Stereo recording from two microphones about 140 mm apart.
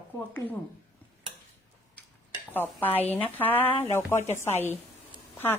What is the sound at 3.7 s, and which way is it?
Speech, 40° left (ahead or behind).